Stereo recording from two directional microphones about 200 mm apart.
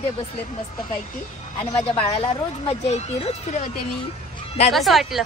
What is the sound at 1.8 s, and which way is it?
Speech, 30° left (ahead or behind).